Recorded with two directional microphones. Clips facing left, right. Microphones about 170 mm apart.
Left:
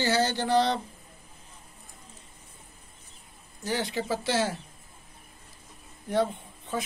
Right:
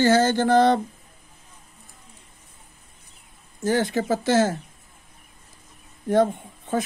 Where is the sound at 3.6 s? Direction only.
45° right (ahead or behind).